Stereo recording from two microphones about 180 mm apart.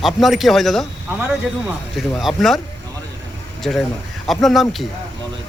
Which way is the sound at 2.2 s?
Centre (ahead or behind).